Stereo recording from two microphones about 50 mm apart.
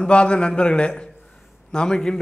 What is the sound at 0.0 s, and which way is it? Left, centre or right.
A man's voice, left.